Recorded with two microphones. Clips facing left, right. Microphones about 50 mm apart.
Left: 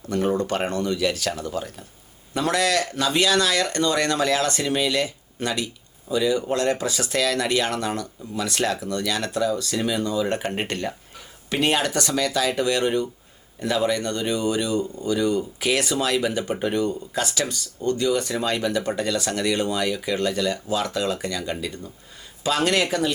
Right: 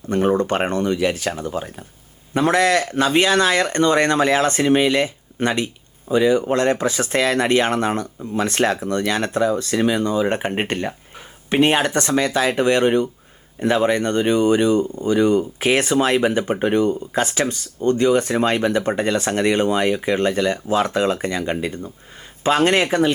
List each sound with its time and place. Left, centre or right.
0.1 s speech: right